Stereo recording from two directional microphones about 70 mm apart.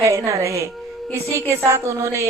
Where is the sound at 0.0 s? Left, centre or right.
Right.